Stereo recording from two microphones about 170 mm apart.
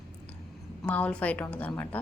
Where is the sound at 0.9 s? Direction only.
10° left (ahead or behind).